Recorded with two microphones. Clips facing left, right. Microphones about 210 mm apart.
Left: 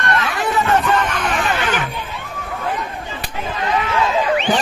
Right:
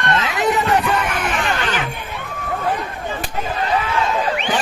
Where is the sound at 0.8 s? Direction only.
10° right (ahead or behind).